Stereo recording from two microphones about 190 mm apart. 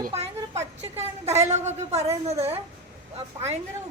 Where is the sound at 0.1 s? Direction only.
35° right (ahead or behind).